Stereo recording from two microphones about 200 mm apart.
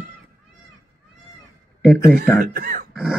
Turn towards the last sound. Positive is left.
turn(degrees=-5)  # may be behind; listen again after turning